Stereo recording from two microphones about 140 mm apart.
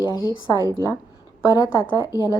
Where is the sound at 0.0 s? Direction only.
30° left (ahead or behind).